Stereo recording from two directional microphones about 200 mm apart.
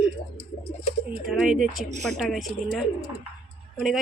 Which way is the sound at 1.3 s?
5° right (ahead or behind).